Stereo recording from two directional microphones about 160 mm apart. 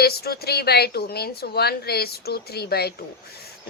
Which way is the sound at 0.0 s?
80° left.